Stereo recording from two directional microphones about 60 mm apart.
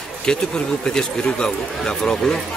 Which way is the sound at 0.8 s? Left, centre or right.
Centre.